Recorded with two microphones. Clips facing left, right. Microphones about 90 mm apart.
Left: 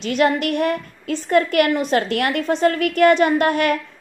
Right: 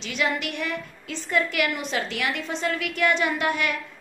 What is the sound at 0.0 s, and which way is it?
A woman's voice, 50° left (ahead or behind).